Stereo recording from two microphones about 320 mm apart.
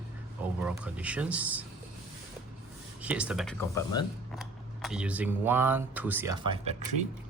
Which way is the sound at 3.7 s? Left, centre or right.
Centre.